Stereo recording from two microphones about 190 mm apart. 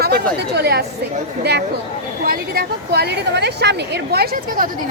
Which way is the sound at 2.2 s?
50° right (ahead or behind).